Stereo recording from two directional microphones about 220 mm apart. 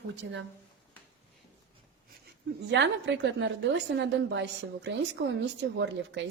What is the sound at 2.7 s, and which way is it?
A woman's voice, 55° right (ahead or behind).